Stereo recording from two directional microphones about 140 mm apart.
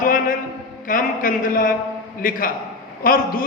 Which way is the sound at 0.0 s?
80° left.